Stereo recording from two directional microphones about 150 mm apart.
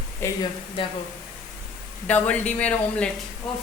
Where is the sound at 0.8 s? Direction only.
35° left (ahead or behind).